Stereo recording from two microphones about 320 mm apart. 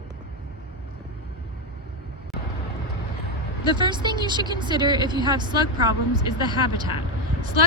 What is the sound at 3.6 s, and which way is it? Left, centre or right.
A woman's voice, centre.